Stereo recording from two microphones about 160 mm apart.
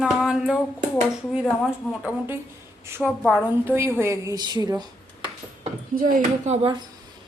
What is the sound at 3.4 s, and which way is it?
A woman's voice, 15° right (ahead or behind).